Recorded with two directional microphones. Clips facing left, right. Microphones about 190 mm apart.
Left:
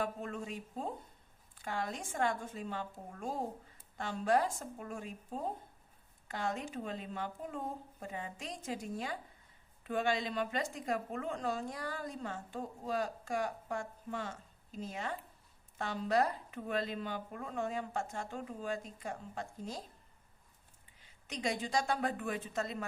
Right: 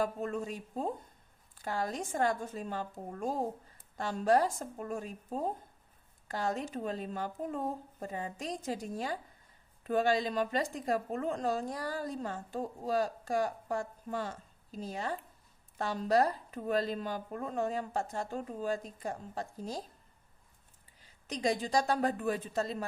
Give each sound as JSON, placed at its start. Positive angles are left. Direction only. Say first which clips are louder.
{"t": 0.0, "sound": "a woman's voice", "louder": "right 5 dB", "side_deg": -40}
{"t": 21.0, "sound": "a woman's voice", "louder": "right 5 dB", "side_deg": -35}